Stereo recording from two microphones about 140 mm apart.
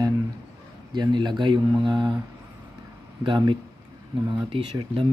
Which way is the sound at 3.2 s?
35° right (ahead or behind).